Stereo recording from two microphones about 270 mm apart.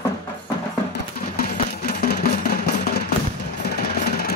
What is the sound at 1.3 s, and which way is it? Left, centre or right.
Music, left.